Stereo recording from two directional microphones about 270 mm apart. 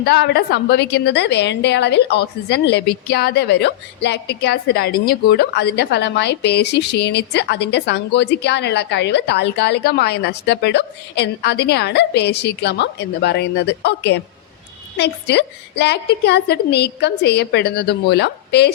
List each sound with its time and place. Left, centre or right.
0.0 s a woman's voice: left